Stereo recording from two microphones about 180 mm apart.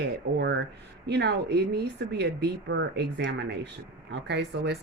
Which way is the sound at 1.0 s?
70° right (ahead or behind).